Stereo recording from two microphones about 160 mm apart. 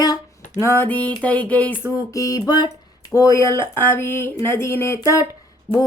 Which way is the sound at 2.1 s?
20° left (ahead or behind).